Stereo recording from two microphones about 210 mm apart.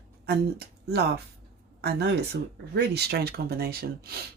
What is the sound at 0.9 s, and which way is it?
Speech, 50° right (ahead or behind).